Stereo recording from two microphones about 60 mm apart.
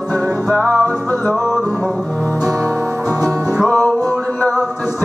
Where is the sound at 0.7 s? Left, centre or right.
Left.